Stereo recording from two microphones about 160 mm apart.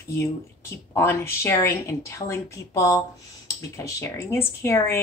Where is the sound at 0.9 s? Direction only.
15° left (ahead or behind).